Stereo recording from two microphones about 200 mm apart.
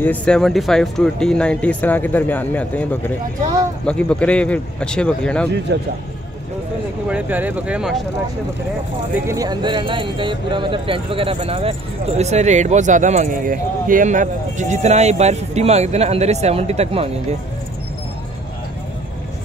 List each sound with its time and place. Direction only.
0.0 s speech: 5° left (ahead or behind)
5.7 s a man's voice: 55° right (ahead or behind)
7.1 s speech: 10° right (ahead or behind)
9.2 s speech: 15° right (ahead or behind)